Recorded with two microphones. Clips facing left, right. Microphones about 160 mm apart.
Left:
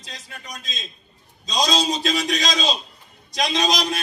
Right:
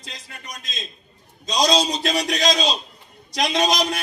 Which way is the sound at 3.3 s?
55° right (ahead or behind).